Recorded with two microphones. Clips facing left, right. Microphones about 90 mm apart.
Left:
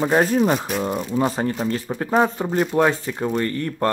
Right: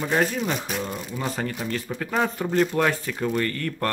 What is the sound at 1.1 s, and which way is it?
Speech, 30° left (ahead or behind).